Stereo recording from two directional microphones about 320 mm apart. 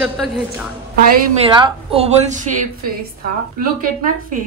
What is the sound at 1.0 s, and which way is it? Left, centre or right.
Speech, centre.